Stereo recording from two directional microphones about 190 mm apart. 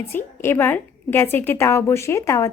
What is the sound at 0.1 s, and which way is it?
A woman's voice, 10° left (ahead or behind).